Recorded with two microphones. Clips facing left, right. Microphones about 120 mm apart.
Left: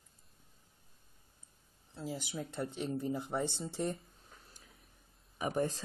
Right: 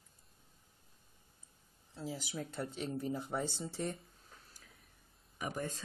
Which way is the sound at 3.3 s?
15° left (ahead or behind).